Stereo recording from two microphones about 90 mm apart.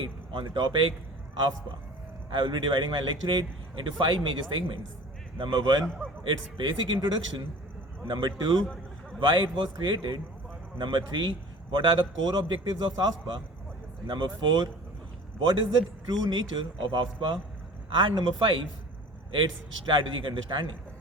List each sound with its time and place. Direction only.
0.0 s speech: 65° right (ahead or behind)
2.3 s a man's voice: 60° right (ahead or behind)
5.8 s a man's voice: 10° left (ahead or behind)
6.2 s a man's voice: 65° right (ahead or behind)
9.2 s a man's voice: 60° right (ahead or behind)
16.0 s a man's voice: 55° right (ahead or behind)